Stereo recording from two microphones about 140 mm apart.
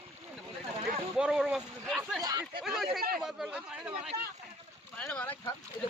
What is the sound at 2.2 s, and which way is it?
Speech, 30° right (ahead or behind).